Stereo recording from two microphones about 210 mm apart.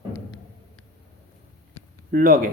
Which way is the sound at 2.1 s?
45° right (ahead or behind).